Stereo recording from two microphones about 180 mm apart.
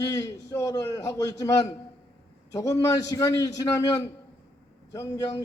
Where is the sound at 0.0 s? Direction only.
20° left (ahead or behind).